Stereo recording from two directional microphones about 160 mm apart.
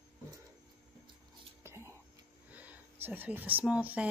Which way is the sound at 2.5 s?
10° right (ahead or behind).